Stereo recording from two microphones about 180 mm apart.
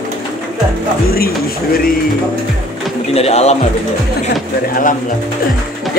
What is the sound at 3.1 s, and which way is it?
Speech, 35° left (ahead or behind).